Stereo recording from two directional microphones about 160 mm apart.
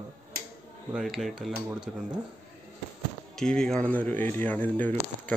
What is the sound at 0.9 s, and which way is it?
Speech, centre (ahead or behind).